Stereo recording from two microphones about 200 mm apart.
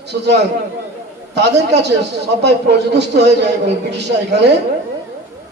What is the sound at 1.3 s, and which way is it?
A man's voice, 55° right (ahead or behind).